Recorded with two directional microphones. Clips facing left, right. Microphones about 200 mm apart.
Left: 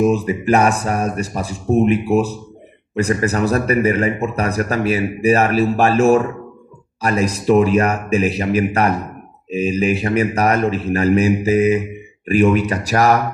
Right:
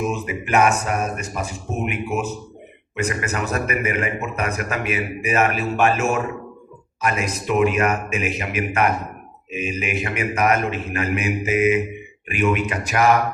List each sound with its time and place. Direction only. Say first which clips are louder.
0.0 s a man's voice: left 9 dB; 35° left (ahead or behind)